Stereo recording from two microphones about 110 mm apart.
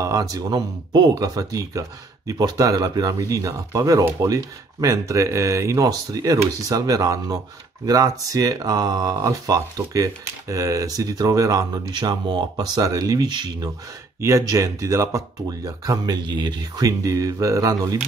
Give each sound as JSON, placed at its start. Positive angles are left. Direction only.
{"t": 0.0, "sound": "speech", "side_deg": -30}
{"t": 14.2, "sound": "speech", "side_deg": -30}